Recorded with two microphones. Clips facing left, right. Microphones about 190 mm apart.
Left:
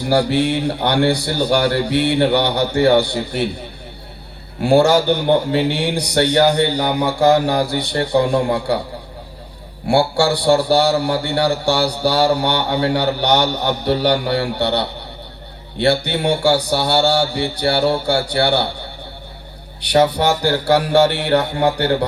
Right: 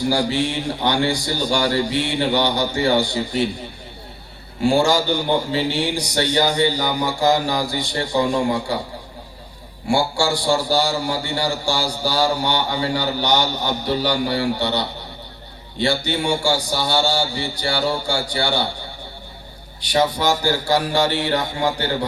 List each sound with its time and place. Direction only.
0.1 s a man's voice: 60° left (ahead or behind)
4.6 s a man's voice: 60° left (ahead or behind)
9.8 s a man's voice: 60° left (ahead or behind)
19.8 s a man's voice: 65° left (ahead or behind)